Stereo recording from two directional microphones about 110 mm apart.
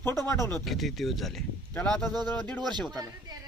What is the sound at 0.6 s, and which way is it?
Speech, centre (ahead or behind).